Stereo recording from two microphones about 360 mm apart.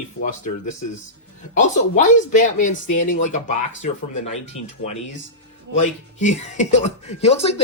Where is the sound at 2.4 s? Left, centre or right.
Left.